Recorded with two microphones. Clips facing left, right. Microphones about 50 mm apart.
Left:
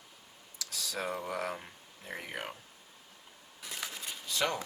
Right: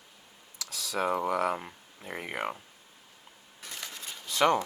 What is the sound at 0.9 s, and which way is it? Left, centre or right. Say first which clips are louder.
Speech: right 8 dB; right.